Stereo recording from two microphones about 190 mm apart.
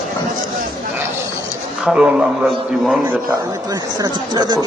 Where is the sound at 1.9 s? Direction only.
Centre (ahead or behind).